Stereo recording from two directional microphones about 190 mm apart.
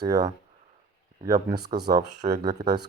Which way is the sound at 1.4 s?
20° right (ahead or behind).